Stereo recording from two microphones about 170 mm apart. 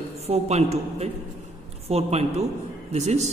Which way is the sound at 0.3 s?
40° right (ahead or behind).